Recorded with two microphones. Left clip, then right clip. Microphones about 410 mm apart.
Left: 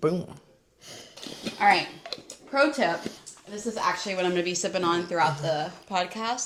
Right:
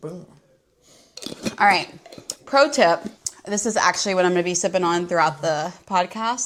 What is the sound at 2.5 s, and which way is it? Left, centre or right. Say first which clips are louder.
Speech: right 7 dB; right.